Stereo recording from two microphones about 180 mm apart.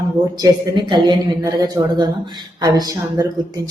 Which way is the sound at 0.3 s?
25° right (ahead or behind).